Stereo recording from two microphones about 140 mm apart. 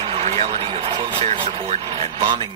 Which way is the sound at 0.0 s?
40° right (ahead or behind).